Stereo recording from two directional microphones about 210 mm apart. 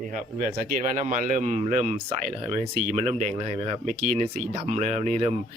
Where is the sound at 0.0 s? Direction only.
35° right (ahead or behind).